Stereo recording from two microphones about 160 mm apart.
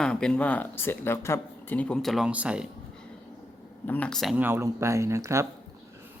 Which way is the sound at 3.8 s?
10° left (ahead or behind).